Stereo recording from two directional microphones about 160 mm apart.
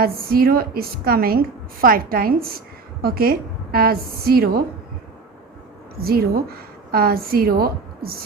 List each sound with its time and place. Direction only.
0.0 s a woman's voice: 70° right (ahead or behind)
6.0 s a woman's voice: 70° right (ahead or behind)